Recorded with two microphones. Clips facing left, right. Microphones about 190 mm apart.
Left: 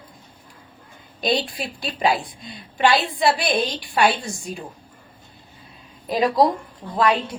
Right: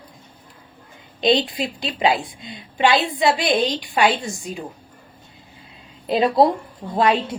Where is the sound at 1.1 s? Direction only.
20° right (ahead or behind).